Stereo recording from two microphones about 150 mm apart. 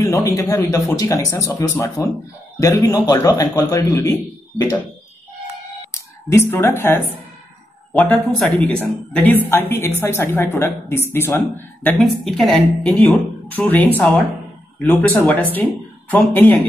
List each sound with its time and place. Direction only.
0.0 s a sound: 20° left (ahead or behind)
0.4 s speech: 20° left (ahead or behind)
5.9 s speech: 15° left (ahead or behind)
7.9 s speech: centre (ahead or behind)